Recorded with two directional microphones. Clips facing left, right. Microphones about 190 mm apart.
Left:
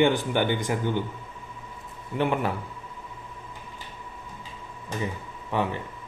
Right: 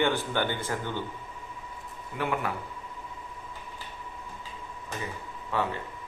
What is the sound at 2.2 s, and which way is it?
Speech, 25° left (ahead or behind).